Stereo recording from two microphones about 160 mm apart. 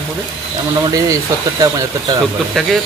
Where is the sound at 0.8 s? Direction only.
25° right (ahead or behind).